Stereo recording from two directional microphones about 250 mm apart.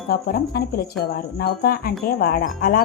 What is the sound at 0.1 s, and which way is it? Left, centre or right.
Speech, left.